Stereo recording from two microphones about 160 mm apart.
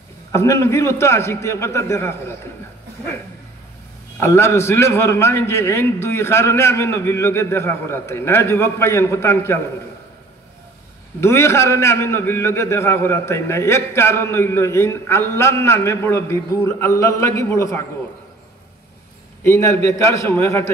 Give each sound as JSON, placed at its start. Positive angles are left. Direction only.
{"t": 0.3, "sound": "a man's voice", "side_deg": 15}
{"t": 4.2, "sound": "a man's voice", "side_deg": 15}
{"t": 11.1, "sound": "a man's voice", "side_deg": 15}
{"t": 19.4, "sound": "a man's voice", "side_deg": 15}